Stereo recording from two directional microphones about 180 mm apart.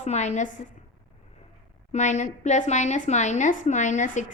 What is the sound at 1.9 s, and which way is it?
A woman's voice, 40° left (ahead or behind).